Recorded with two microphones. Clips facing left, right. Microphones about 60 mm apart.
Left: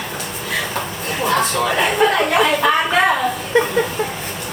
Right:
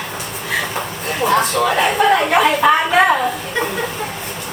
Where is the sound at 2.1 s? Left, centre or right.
Centre.